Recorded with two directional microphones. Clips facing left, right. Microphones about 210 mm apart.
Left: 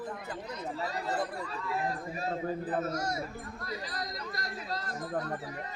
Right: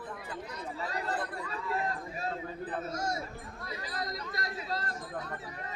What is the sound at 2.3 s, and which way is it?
Speech, 40° left (ahead or behind).